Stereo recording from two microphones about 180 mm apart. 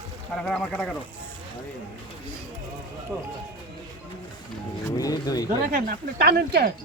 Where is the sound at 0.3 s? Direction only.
Centre (ahead or behind).